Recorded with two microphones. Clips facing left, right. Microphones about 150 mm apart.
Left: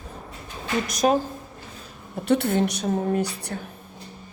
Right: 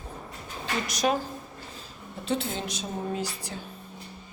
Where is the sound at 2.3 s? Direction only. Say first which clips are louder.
Left 9 dB; 65° left (ahead or behind).